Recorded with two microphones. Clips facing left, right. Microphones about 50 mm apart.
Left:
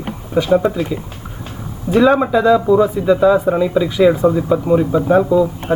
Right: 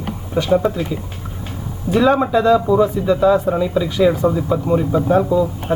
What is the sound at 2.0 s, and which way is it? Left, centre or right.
Speech, centre.